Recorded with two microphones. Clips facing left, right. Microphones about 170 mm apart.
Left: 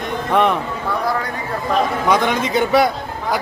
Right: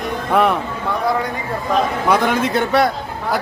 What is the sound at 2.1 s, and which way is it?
Speech, 5° right (ahead or behind).